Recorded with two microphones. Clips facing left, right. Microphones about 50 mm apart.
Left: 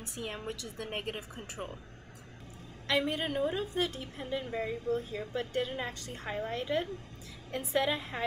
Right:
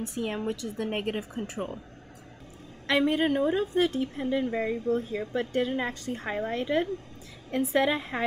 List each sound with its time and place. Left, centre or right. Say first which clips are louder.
0.2 s a woman's voice: right 7 dB; right
2.9 s a woman's voice: right 7 dB; right